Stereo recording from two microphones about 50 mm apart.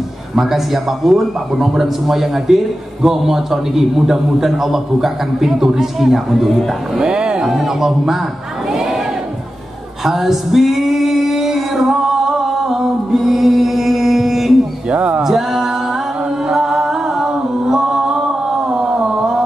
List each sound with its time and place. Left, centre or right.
0.4 s a man's voice: centre
7.0 s speech: centre
8.7 s crowd: centre
10.0 s male singing: centre
14.9 s speech: right
15.2 s music: centre
18.7 s a sound: centre